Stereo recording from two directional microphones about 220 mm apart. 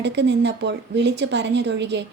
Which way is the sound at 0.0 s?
50° right (ahead or behind).